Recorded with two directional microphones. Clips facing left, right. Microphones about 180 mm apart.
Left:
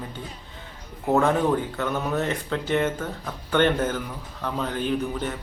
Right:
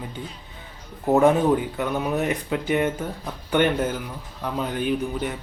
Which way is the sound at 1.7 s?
10° right (ahead or behind).